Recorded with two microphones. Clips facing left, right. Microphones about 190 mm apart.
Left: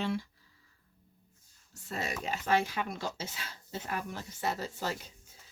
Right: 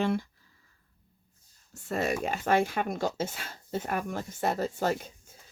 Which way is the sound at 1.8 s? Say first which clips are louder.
Right 7 dB; 50° right (ahead or behind).